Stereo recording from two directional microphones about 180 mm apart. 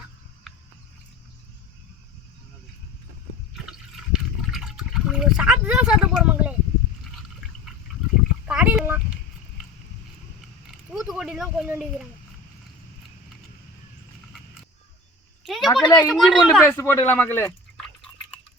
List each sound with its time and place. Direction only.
3.5 s liquid: centre (ahead or behind)
8.4 s a sound: 5° right (ahead or behind)
11.1 s speech: 5° right (ahead or behind)
15.4 s a woman's voice: centre (ahead or behind)
16.6 s speech: 15° left (ahead or behind)
17.8 s a sound: 5° left (ahead or behind)